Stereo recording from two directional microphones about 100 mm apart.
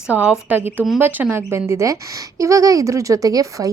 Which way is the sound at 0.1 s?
15° right (ahead or behind).